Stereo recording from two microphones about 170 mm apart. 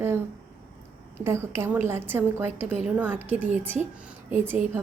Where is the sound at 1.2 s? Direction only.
15° right (ahead or behind).